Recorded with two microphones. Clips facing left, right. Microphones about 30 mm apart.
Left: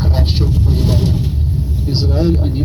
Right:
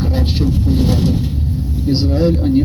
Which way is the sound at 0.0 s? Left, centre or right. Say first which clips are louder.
Right 1 dB; left.